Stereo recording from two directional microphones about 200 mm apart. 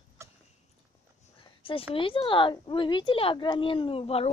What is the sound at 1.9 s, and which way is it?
A woman's voice, 25° left (ahead or behind).